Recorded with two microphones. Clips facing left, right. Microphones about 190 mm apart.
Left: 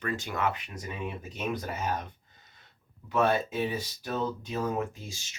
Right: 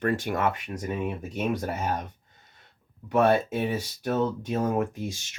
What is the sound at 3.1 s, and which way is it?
Speech, 60° right (ahead or behind).